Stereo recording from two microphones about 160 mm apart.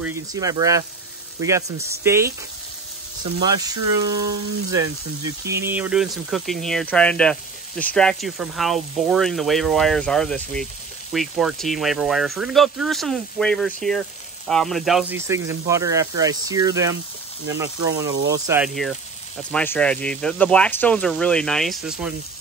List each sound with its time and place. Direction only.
0.0 s speech: 20° right (ahead or behind)
3.3 s speech: 25° right (ahead or behind); by 15.1 s centre (ahead or behind)
15.1 s speech: 20° right (ahead or behind)
18.6 s speech: centre (ahead or behind)